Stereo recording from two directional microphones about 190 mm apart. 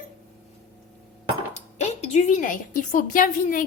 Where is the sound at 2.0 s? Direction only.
35° left (ahead or behind).